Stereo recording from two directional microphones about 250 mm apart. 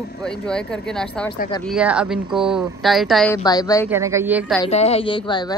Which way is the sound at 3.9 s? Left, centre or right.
Centre.